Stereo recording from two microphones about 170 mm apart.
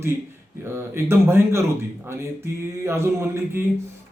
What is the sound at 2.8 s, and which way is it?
Speech, 15° right (ahead or behind).